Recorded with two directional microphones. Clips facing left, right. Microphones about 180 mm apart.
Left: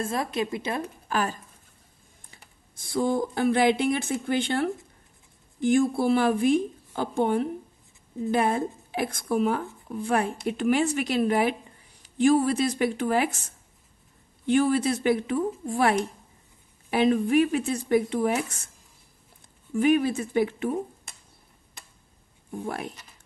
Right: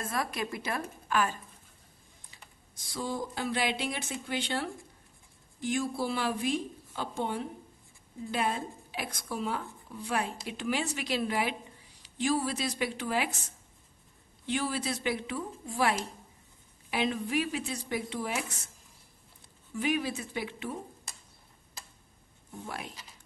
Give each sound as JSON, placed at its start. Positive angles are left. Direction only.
{"t": 0.0, "sound": "speech", "side_deg": 25}
{"t": 1.0, "sound": "speech", "side_deg": 40}
{"t": 2.3, "sound": "speech", "side_deg": 55}
{"t": 14.4, "sound": "speech", "side_deg": 50}
{"t": 19.7, "sound": "speech", "side_deg": 50}
{"t": 22.6, "sound": "speech", "side_deg": 50}